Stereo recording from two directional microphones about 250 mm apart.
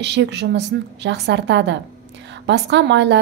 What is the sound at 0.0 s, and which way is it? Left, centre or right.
A woman's voice, right.